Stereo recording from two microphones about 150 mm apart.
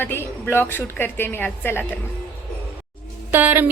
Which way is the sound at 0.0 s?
15° left (ahead or behind).